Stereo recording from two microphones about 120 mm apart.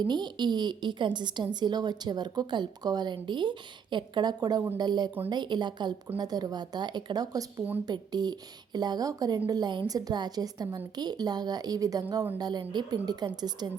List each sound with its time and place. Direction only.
0.1 s a woman's voice: 35° right (ahead or behind)